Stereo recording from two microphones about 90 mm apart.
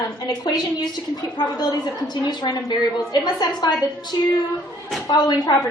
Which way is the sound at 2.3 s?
45° left (ahead or behind).